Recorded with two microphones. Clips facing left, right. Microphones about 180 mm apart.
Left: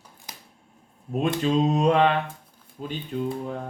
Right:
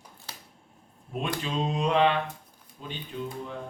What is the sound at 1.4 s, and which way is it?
A man's voice, 45° left (ahead or behind).